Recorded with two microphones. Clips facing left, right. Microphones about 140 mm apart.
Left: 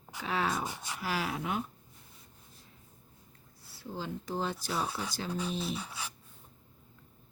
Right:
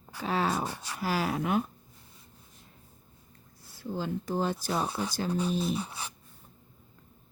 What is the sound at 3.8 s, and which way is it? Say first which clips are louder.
Speech: right 6 dB; 50° right (ahead or behind).